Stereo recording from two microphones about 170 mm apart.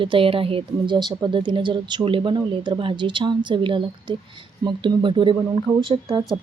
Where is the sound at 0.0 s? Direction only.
30° right (ahead or behind).